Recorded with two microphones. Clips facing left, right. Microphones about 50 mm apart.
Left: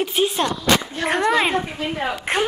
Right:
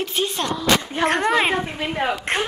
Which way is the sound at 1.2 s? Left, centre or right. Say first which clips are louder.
Left 1 dB; centre.